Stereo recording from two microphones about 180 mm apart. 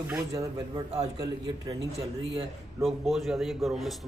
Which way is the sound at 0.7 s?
40° right (ahead or behind).